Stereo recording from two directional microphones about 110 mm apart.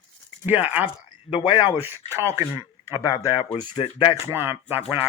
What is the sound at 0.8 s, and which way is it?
Speech, 55° left (ahead or behind).